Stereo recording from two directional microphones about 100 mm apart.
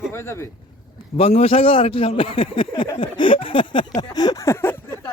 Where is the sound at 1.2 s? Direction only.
80° left.